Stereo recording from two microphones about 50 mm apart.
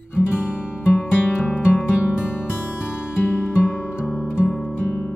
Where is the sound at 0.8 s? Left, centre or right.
Left.